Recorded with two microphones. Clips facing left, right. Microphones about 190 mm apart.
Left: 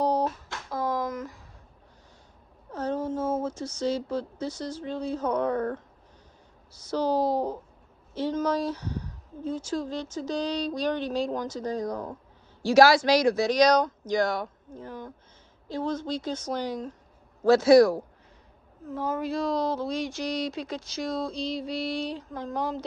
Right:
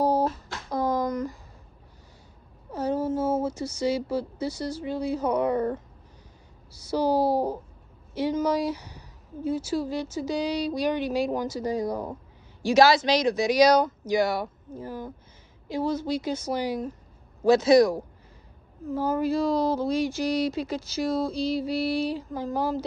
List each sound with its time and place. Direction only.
0.0 s a sound: 5° right (ahead or behind)
2.7 s speech: 10° right (ahead or behind)
12.6 s speech: 20° right (ahead or behind)
13.5 s speech: 5° right (ahead or behind)
17.5 s speech: 20° right (ahead or behind)
18.9 s speech: centre (ahead or behind)